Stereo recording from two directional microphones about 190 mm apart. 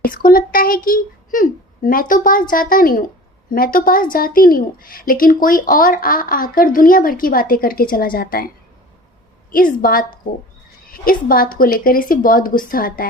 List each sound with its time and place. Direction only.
0.0 s a woman's voice: 50° left (ahead or behind)
9.5 s a woman's voice: 45° left (ahead or behind)